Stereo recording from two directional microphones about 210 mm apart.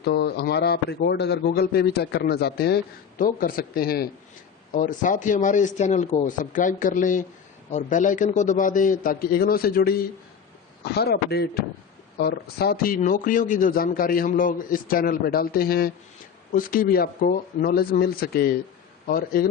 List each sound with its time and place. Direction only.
0.0 s a man's voice: 50° left (ahead or behind)